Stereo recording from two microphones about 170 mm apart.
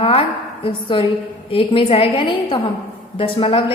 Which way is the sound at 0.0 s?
35° left (ahead or behind).